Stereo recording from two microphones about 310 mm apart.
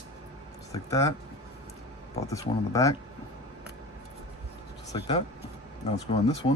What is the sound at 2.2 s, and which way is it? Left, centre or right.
Speech, centre.